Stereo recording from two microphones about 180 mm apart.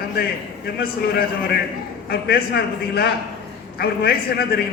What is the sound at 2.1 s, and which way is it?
A man's voice, 60° left (ahead or behind).